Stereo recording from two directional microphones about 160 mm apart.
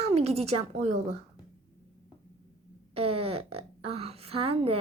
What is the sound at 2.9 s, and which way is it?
Speech, 35° right (ahead or behind).